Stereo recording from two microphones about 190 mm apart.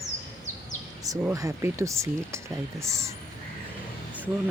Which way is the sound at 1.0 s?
15° right (ahead or behind).